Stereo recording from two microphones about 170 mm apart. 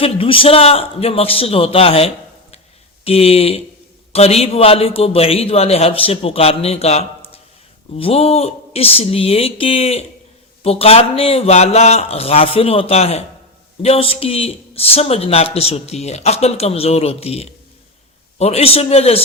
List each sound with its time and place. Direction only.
0.0 s speech: 30° left (ahead or behind)